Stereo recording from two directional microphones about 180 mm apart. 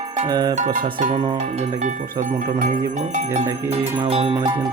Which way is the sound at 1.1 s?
25° right (ahead or behind).